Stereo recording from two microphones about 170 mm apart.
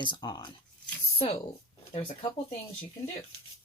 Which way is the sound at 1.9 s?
35° left (ahead or behind).